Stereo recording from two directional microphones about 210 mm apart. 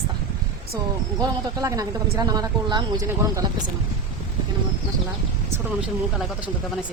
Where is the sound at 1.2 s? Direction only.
15° right (ahead or behind).